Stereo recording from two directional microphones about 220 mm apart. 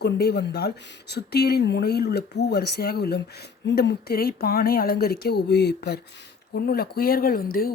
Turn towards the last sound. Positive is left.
turn(degrees=40)  # may be behind; listen again after turning